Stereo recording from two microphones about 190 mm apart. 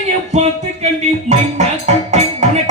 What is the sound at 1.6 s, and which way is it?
Music, 35° right (ahead or behind).